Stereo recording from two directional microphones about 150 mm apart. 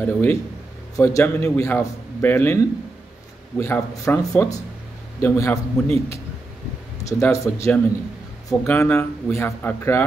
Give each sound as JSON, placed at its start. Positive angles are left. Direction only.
{"t": 0.0, "sound": "a man's voice", "side_deg": 15}
{"t": 5.9, "sound": "speech", "side_deg": -40}
{"t": 7.1, "sound": "a man's voice", "side_deg": 20}